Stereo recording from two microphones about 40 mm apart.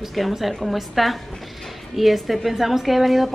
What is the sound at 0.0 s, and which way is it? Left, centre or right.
A woman's voice, centre.